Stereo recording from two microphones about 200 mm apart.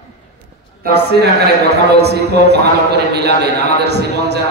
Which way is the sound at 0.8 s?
55° right (ahead or behind).